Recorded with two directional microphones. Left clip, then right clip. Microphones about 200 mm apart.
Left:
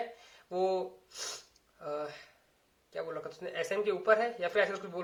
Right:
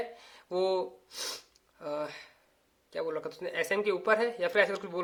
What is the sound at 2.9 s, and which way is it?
Speech, 40° right (ahead or behind).